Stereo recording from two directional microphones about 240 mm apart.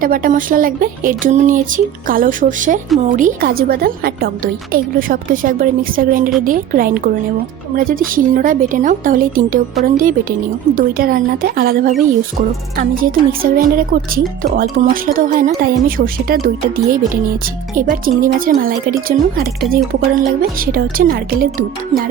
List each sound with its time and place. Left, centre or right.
0.0 s speech: right
17.7 s speech: right